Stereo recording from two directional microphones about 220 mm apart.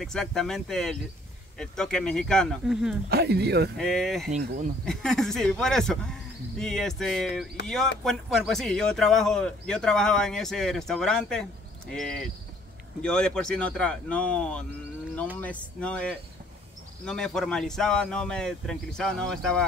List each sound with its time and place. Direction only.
0.0 s speech: centre (ahead or behind)
3.1 s speech: 45° right (ahead or behind)
3.7 s speech: centre (ahead or behind)
4.4 s speech: 45° right (ahead or behind)
4.8 s speech: centre (ahead or behind)